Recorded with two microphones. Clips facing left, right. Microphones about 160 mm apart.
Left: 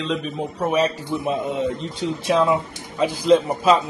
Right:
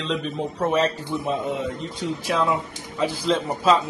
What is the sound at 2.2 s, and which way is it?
Speech, 20° left (ahead or behind).